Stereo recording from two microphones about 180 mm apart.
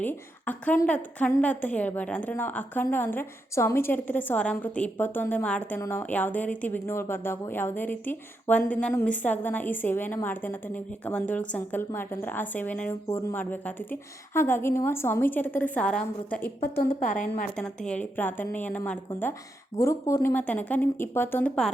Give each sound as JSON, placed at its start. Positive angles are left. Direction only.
{"t": 0.0, "sound": "a woman's voice", "side_deg": 10}
{"t": 16.7, "sound": "a woman's voice", "side_deg": 55}
{"t": 17.8, "sound": "a woman's voice", "side_deg": 10}